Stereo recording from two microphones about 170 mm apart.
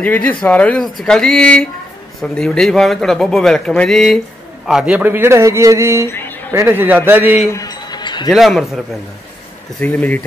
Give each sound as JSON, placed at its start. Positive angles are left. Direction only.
{"t": 0.0, "sound": "a man's voice", "side_deg": 10}
{"t": 7.5, "sound": "music", "side_deg": 20}
{"t": 8.3, "sound": "a man's voice", "side_deg": 0}